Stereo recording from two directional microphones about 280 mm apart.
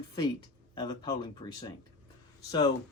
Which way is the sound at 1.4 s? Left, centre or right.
Centre.